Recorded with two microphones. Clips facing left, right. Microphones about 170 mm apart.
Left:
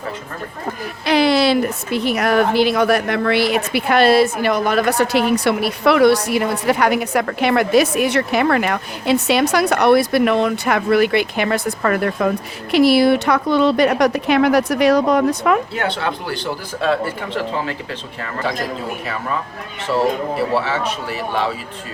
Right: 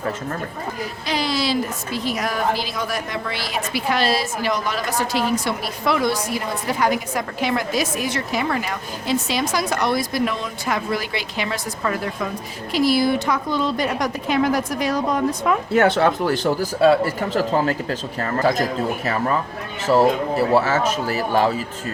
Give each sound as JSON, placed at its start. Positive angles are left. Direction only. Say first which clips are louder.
{"t": 1.0, "sound": "a woman's voice", "louder": "left 9 dB", "side_deg": 65}
{"t": 15.7, "sound": "speech", "louder": "right 6 dB", "side_deg": -45}
{"t": 20.7, "sound": "speech", "louder": "right 2 dB", "side_deg": -45}